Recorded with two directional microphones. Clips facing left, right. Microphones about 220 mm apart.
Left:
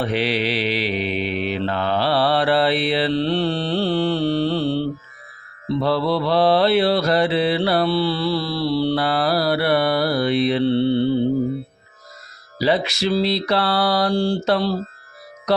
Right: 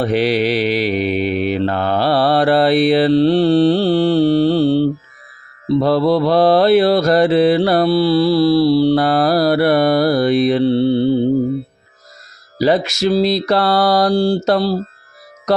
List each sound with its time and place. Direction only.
0.0 s mantra: 40° right (ahead or behind)
12.5 s mantra: 45° right (ahead or behind)